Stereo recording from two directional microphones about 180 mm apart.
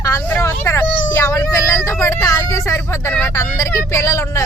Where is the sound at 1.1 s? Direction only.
15° left (ahead or behind).